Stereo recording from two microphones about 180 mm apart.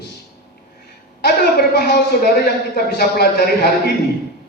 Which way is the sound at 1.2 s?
60° left (ahead or behind).